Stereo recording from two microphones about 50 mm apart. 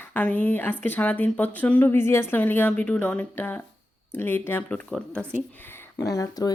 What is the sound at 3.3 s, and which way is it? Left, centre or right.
Speech, left.